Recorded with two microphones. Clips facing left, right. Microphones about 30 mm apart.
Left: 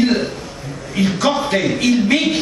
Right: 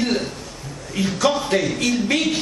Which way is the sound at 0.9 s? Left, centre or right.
Centre.